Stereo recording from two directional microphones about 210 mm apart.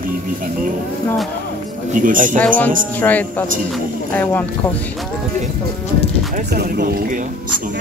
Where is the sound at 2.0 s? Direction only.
40° right (ahead or behind).